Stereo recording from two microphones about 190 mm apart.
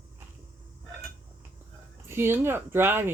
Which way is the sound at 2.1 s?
10° right (ahead or behind).